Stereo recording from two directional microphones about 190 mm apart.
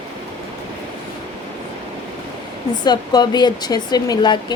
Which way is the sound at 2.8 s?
20° left (ahead or behind).